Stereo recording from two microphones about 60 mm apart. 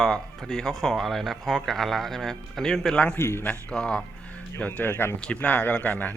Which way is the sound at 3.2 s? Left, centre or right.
Left.